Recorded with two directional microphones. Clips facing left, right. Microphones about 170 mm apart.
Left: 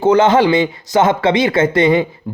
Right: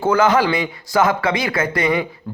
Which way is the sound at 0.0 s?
25° left (ahead or behind).